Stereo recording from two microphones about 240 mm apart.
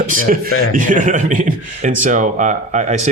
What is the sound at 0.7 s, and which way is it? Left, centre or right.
Speech, right.